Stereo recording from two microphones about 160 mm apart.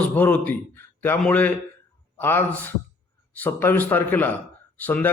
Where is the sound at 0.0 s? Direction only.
10° left (ahead or behind).